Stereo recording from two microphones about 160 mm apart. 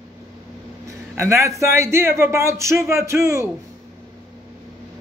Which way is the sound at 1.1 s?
15° right (ahead or behind).